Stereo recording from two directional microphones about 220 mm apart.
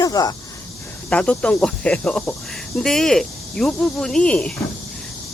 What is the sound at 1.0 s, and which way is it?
Speech, 5° left (ahead or behind).